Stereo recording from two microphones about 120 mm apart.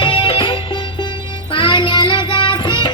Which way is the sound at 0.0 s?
45° left (ahead or behind).